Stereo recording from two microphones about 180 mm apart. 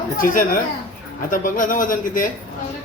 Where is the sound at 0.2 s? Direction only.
50° left (ahead or behind).